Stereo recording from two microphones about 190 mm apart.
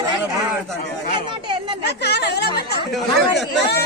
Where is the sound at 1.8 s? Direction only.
60° left (ahead or behind).